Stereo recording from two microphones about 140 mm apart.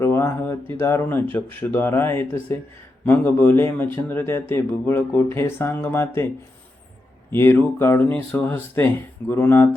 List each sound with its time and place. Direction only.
0.0 s speech: 15° left (ahead or behind)
7.3 s speech: 15° left (ahead or behind)